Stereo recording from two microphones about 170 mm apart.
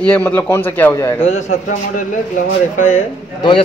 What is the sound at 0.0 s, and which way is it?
Speech, 10° left (ahead or behind).